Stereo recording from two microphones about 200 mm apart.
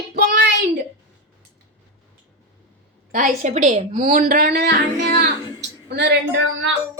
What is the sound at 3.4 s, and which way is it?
A woman's voice, 35° right (ahead or behind).